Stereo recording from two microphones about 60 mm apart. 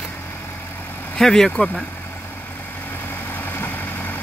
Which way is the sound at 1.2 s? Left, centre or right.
Centre.